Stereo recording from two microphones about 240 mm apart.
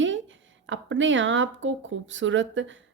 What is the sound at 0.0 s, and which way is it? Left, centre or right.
Speech, right.